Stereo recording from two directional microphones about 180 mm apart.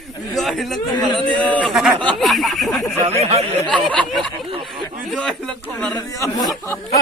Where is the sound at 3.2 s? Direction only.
35° right (ahead or behind).